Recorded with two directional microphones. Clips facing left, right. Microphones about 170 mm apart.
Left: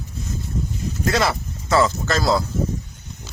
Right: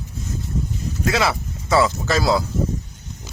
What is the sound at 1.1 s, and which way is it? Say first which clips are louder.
Speech: even; 5° right (ahead or behind).